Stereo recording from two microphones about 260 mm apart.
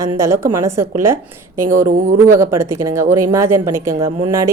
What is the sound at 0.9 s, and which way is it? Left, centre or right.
Speech, right.